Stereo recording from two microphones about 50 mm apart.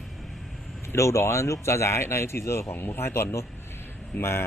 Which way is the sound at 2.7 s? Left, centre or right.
Left.